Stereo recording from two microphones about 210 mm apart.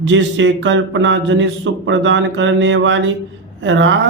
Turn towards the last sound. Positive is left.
turn(degrees=-60)  # may be behind; listen again after turning